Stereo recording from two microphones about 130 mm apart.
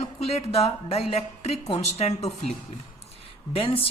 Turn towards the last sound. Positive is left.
turn(degrees=45)  # may be behind; listen again after turning